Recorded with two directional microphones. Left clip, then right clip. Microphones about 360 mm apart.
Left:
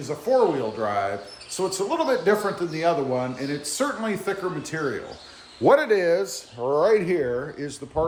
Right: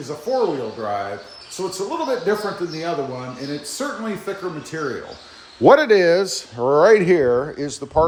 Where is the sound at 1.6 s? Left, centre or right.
Centre.